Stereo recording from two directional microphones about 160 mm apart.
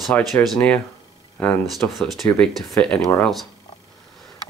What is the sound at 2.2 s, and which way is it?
Speech, 15° left (ahead or behind).